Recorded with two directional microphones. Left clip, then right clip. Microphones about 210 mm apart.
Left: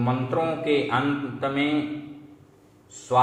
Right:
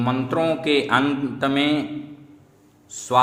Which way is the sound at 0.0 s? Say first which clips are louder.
Right 3 dB; 55° right (ahead or behind).